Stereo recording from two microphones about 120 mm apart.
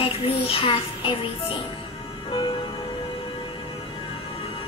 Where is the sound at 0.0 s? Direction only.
50° left (ahead or behind).